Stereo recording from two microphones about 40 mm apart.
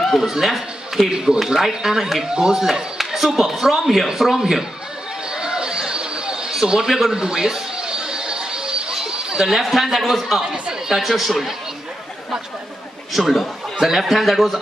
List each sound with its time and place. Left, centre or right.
0.2 s a man's voice: centre
5.3 s a sound: centre
7.2 s music: centre
9.5 s a man's voice: centre
13.1 s a man's voice: centre